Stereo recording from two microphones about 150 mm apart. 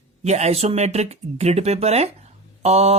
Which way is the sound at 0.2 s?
45° right (ahead or behind).